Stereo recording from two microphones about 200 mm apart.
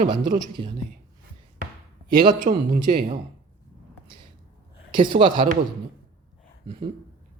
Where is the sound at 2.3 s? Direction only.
40° right (ahead or behind).